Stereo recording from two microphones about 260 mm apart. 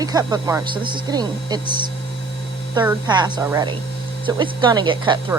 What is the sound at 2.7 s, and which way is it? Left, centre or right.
Speech, centre.